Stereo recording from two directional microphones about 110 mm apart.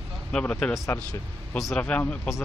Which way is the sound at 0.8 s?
30° left (ahead or behind).